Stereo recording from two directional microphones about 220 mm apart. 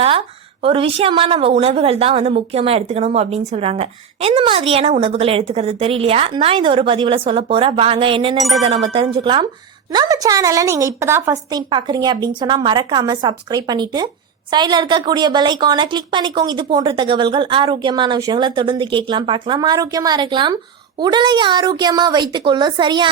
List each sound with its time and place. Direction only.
0.6 s a woman's voice: 25° right (ahead or behind)
8.4 s speech: centre (ahead or behind)
8.6 s a woman's voice: 25° right (ahead or behind)